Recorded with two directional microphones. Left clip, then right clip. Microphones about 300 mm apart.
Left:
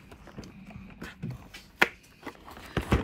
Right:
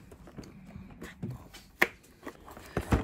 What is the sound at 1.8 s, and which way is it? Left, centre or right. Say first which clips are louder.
Finger snapping: left 3 dB; centre.